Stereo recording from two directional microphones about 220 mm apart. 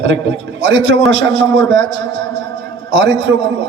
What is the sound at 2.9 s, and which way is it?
Speech, 55° right (ahead or behind).